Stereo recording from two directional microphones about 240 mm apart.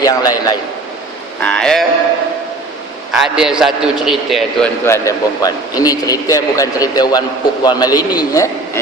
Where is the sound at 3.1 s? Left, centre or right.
Centre.